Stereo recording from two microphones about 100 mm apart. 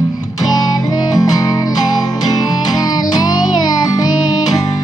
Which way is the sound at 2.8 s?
40° left (ahead or behind).